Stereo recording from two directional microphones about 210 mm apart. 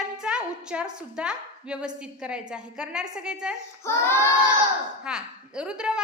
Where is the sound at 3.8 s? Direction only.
10° left (ahead or behind).